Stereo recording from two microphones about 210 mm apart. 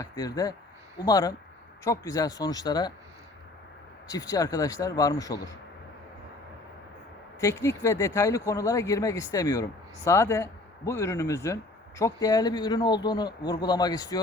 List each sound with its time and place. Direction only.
0.0 s speech: 15° left (ahead or behind)
4.1 s speech: 15° left (ahead or behind)
7.3 s speech: 15° left (ahead or behind)